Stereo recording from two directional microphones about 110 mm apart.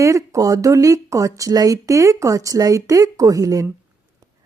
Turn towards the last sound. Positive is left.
turn(degrees=-30)  # may be behind; listen again after turning